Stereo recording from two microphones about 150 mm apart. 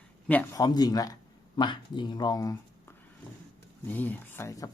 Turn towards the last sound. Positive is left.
turn(degrees=20)  # may be behind; listen again after turning